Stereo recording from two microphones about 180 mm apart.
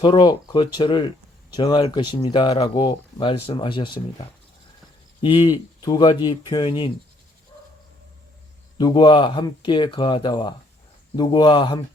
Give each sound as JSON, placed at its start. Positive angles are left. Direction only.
{"t": 0.0, "sound": "speech", "side_deg": 25}
{"t": 5.2, "sound": "speech", "side_deg": 30}
{"t": 8.8, "sound": "speech", "side_deg": 25}